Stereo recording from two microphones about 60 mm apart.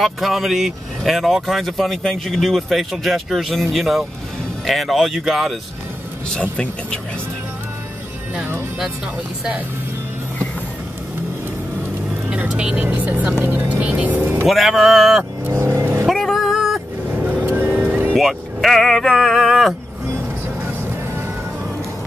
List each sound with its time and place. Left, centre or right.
0.0 s speech: centre
6.5 s speech: centre
12.3 s speech: centre
12.7 s speech: right
14.5 s speech: centre
15.6 s vehicle: right
16.1 s vehicle: centre
17.3 s vehicle: right
18.1 s speech: centre
19.2 s a sound: centre
20.6 s music: right